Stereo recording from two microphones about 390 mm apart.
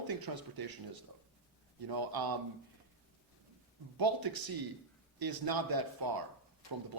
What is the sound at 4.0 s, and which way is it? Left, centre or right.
A man's voice, right.